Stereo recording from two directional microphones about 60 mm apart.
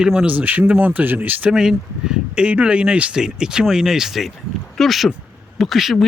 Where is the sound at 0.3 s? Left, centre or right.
Right.